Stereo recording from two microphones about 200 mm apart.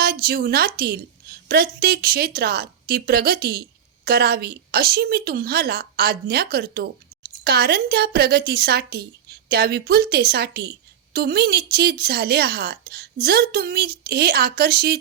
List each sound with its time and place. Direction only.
0.0 s a woman's voice: 50° right (ahead or behind)